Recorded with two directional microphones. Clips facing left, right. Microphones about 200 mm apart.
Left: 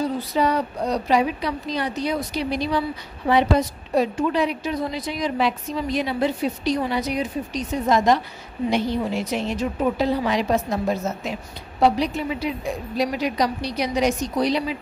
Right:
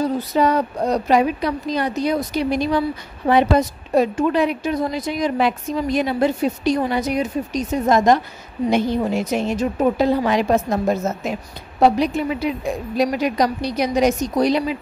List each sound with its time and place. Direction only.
0.0 s a woman's voice: 45° right (ahead or behind)